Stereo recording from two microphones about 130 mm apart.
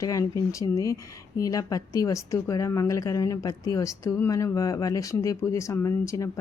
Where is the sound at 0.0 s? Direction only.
25° left (ahead or behind).